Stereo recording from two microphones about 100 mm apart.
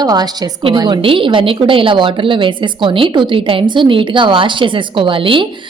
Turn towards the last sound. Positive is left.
turn(degrees=-55)  # may be behind; listen again after turning